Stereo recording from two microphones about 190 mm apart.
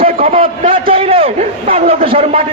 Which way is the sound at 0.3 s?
30° right (ahead or behind).